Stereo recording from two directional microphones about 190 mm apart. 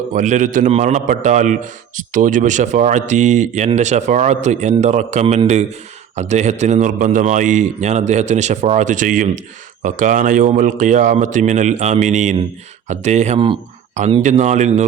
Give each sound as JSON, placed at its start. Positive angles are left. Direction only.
{"t": 0.1, "sound": "a man's voice", "side_deg": -40}